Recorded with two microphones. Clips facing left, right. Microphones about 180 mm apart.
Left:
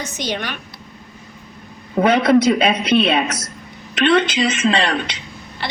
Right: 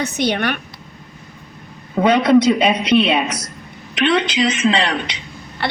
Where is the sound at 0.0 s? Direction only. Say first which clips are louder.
Right 6 dB; 60° right (ahead or behind).